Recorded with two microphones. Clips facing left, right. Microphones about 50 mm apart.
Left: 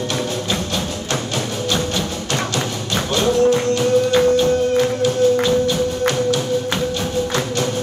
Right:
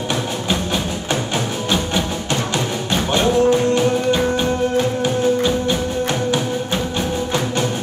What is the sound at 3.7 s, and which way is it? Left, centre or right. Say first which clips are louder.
Music: left 2 dB; right.